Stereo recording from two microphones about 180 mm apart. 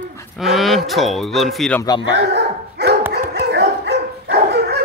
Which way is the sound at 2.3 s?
65° right (ahead or behind).